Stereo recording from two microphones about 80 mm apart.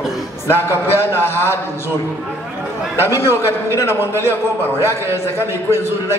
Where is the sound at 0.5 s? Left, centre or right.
Left.